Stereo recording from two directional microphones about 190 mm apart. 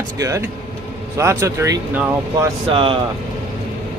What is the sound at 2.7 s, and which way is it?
Speech, 30° right (ahead or behind).